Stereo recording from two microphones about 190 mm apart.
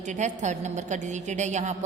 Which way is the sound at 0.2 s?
40° right (ahead or behind).